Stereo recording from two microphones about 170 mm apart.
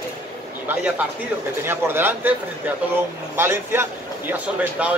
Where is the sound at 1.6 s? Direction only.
15° right (ahead or behind).